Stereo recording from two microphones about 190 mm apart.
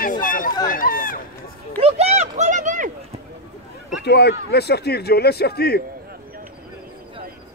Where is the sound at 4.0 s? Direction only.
60° left (ahead or behind).